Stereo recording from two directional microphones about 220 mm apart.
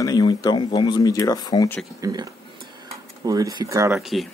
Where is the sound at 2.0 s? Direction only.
15° right (ahead or behind).